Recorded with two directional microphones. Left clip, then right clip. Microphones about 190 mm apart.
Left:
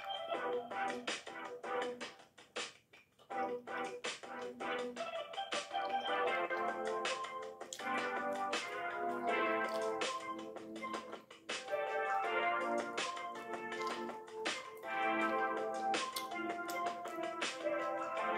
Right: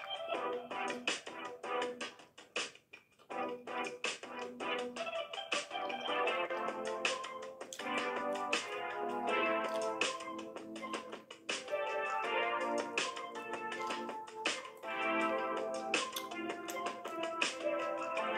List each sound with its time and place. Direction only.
0.3 s music: 35° right (ahead or behind)
3.3 s music: 35° right (ahead or behind)
11.4 s music: 35° right (ahead or behind)